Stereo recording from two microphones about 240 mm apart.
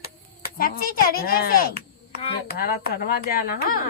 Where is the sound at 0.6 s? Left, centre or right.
Left.